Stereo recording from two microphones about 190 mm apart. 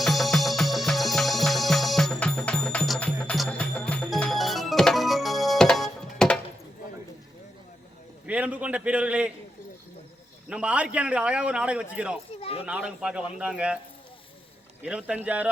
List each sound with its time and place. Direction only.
0.0 s music: centre (ahead or behind)
8.3 s a man's voice: 5° right (ahead or behind)
10.5 s a man's voice: 5° right (ahead or behind)
12.4 s children playing: 30° left (ahead or behind)
12.6 s a man's voice: 5° right (ahead or behind)
14.8 s speech: 5° right (ahead or behind)